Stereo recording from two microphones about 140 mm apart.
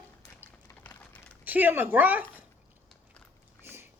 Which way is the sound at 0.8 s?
10° left (ahead or behind).